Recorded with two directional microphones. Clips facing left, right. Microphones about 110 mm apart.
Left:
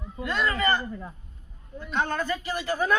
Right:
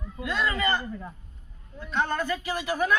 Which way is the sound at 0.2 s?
5° right (ahead or behind).